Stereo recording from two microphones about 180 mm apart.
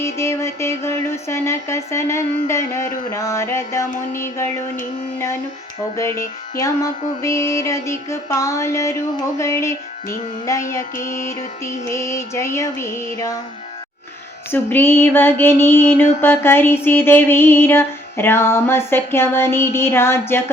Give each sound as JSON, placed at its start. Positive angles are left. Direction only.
{"t": 0.0, "sound": "music", "side_deg": 15}
{"t": 6.0, "sound": "music", "side_deg": 15}
{"t": 10.9, "sound": "music", "side_deg": 45}
{"t": 11.9, "sound": "music", "side_deg": 15}
{"t": 14.5, "sound": "music", "side_deg": 10}